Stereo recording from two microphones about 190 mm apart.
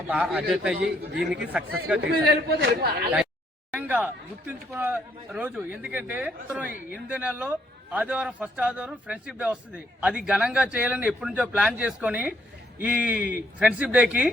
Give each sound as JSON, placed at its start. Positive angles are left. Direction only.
{"t": 0.1, "sound": "a man's voice", "side_deg": -5}
{"t": 0.8, "sound": "a man's voice", "side_deg": -55}
{"t": 1.5, "sound": "a man's voice", "side_deg": -5}
{"t": 2.0, "sound": "a man's voice", "side_deg": -55}
{"t": 3.7, "sound": "speech", "side_deg": -10}